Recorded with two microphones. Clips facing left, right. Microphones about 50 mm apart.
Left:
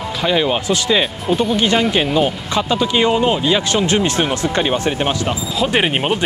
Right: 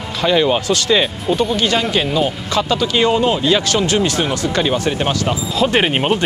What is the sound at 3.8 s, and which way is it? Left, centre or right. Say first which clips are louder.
Speech: even; left.